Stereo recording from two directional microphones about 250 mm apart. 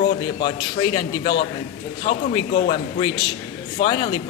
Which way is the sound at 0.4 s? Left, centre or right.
Centre.